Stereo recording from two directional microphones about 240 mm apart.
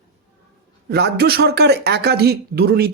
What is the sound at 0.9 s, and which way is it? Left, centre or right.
Speech, right.